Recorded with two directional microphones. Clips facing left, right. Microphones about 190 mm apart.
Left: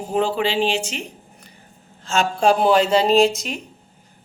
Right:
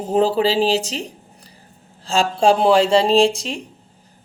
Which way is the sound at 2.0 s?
30° right (ahead or behind).